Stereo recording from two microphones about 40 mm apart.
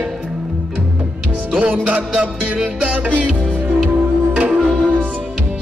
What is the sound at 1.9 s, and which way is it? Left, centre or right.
Music, right.